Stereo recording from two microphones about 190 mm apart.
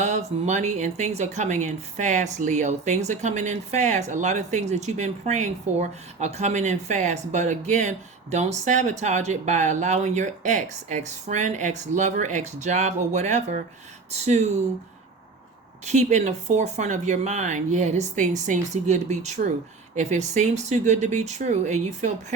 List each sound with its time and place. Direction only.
0.0 s a woman's voice: 35° right (ahead or behind)
15.9 s a woman's voice: 35° right (ahead or behind)